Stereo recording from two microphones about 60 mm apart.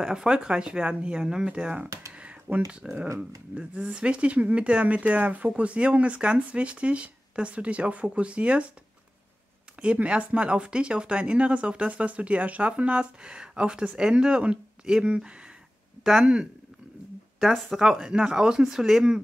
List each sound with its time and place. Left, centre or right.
0.0 s speech: centre
2.1 s a sound: right
2.7 s speech: centre
9.9 s speech: centre
16.0 s speech: centre
17.4 s speech: centre